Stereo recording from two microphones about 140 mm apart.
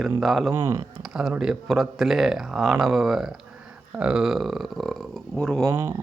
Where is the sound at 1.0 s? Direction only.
5° right (ahead or behind).